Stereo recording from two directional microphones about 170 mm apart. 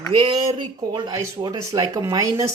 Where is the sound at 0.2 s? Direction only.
30° right (ahead or behind).